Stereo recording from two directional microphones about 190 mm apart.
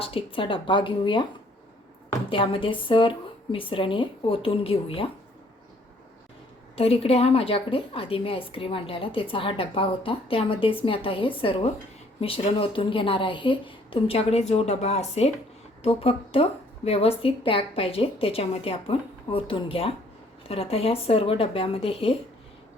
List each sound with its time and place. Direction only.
0.0 s a woman's voice: 30° left (ahead or behind)
2.3 s a woman's voice: 25° left (ahead or behind)
6.7 s a woman's voice: 30° left (ahead or behind)